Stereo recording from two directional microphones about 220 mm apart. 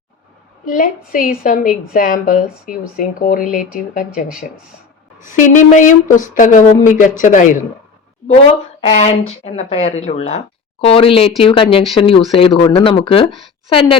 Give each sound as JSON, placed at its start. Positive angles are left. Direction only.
{"t": 0.6, "sound": "a woman's voice", "side_deg": 40}
{"t": 8.8, "sound": "speech", "side_deg": 30}